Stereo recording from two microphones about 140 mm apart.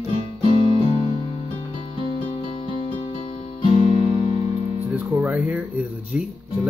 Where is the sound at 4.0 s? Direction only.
15° right (ahead or behind).